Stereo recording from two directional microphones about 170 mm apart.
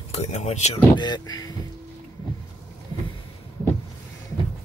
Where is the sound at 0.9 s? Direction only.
25° left (ahead or behind).